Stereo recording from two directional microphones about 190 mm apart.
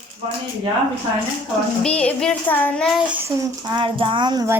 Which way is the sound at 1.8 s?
5° left (ahead or behind).